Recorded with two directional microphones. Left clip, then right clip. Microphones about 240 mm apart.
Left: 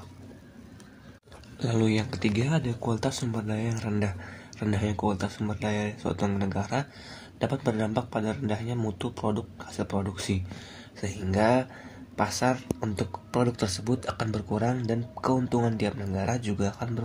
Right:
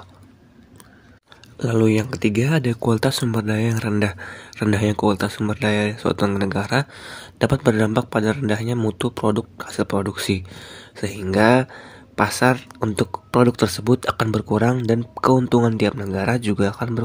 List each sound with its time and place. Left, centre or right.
1.6 s speech: right